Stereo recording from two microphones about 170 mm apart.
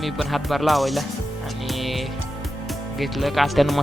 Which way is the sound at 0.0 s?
Centre (ahead or behind).